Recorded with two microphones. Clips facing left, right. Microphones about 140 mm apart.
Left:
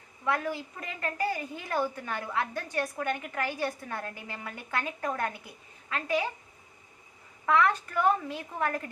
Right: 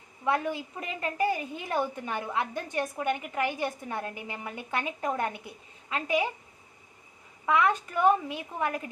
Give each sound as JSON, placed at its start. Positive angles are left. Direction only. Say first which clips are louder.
{"t": 0.3, "sound": "a woman's voice", "louder": "right 2 dB", "side_deg": -20}
{"t": 7.4, "sound": "a woman's voice", "louder": "even", "side_deg": -15}